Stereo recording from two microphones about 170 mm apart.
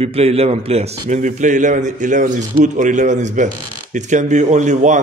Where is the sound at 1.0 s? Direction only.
45° right (ahead or behind).